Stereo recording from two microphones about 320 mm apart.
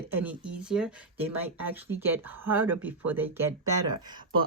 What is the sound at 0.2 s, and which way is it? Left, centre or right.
Speech, centre.